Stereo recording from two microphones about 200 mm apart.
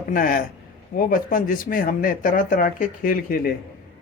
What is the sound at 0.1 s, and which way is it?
Speech, 45° left (ahead or behind).